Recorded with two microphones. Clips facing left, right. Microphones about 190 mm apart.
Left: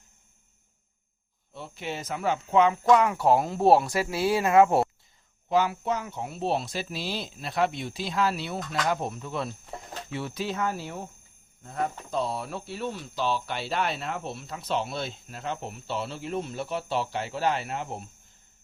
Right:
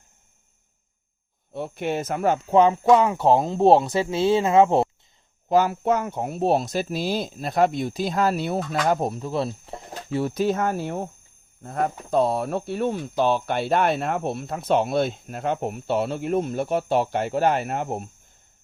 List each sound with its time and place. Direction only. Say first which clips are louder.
1.5 s speech: right 9 dB; 55° right (ahead or behind); by 4.9 s 20° right (ahead or behind)
5.5 s speech: right 5 dB; 45° right (ahead or behind)